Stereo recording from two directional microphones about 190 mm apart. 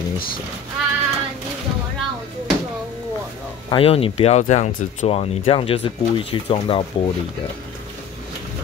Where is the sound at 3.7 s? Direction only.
30° left (ahead or behind).